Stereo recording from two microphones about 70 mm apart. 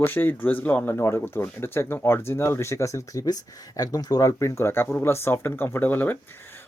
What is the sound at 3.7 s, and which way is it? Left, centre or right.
Speech, left.